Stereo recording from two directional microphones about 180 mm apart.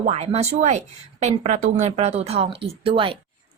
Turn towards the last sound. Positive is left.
turn(degrees=-30)  # may be behind; listen again after turning